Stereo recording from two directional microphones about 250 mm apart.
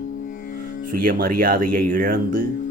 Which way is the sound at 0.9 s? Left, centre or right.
Right.